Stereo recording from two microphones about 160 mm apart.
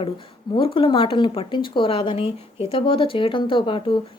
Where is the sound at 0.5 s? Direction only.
35° left (ahead or behind).